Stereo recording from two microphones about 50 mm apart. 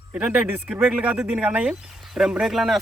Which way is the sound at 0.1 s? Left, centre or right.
Right.